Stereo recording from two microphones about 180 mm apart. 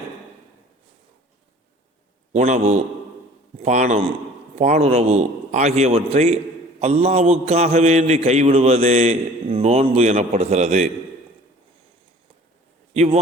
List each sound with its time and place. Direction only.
2.3 s a man's voice: 40° right (ahead or behind)
12.9 s a man's voice: 35° right (ahead or behind)